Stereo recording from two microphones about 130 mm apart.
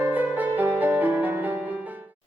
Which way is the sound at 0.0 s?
15° right (ahead or behind).